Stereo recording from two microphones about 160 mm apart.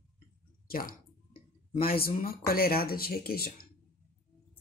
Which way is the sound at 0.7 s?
65° left (ahead or behind).